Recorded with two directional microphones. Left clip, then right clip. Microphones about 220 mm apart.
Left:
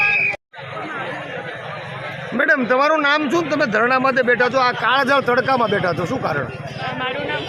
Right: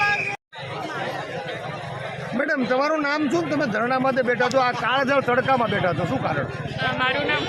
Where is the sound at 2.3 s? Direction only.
30° left (ahead or behind).